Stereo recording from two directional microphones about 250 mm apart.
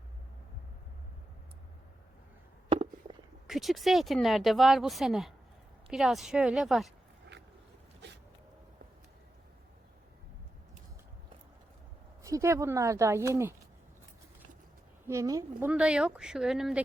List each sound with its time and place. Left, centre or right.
2.6 s a sound: right
3.4 s speech: centre
12.2 s speech: centre
15.0 s speech: centre